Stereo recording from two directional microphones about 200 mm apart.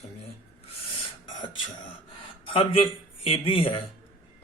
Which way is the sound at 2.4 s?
25° left (ahead or behind).